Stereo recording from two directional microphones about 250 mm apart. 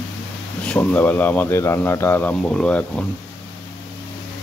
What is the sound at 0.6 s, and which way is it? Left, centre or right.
Speech, centre.